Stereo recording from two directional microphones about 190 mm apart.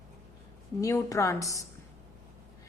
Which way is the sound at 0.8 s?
15° left (ahead or behind).